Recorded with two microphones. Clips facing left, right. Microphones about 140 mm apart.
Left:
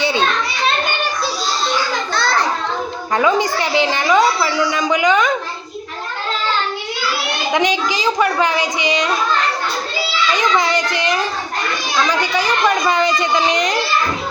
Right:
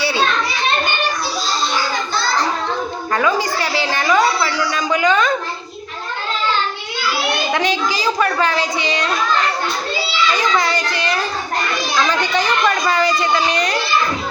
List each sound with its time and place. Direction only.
0.0 s children playing: 20° left (ahead or behind)
3.2 s a woman's voice: 20° left (ahead or behind)
7.5 s a woman's voice: 15° left (ahead or behind)
10.3 s a child's voice: 20° left (ahead or behind)